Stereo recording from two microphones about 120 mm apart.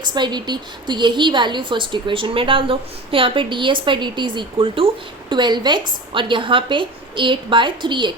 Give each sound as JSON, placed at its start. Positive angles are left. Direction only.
{"t": 0.0, "sound": "a woman's voice", "side_deg": -35}